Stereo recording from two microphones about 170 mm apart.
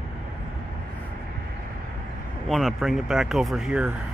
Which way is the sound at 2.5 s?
Centre (ahead or behind).